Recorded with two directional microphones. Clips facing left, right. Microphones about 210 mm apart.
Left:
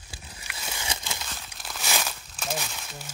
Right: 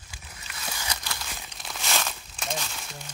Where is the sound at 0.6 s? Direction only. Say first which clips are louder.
Even; 20° left (ahead or behind).